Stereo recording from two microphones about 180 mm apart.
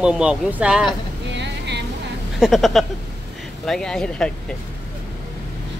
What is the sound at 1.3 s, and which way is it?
Vehicle, 75° right (ahead or behind).